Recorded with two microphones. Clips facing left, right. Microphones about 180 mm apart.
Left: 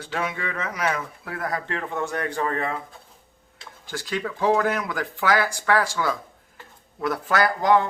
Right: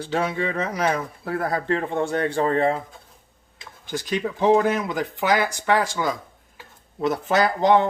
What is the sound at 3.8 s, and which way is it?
Speech, 20° right (ahead or behind).